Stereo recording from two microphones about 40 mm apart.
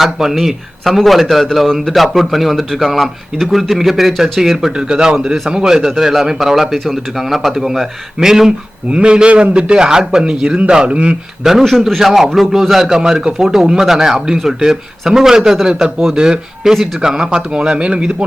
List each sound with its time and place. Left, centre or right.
0.0 s speech: centre
1.6 s speech: centre
1.9 s speech: centre
4.7 s a man's voice: right
8.9 s a man's voice: right
11.4 s a man's voice: centre